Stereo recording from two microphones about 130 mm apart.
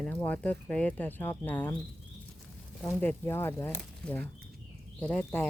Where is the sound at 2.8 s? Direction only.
15° left (ahead or behind).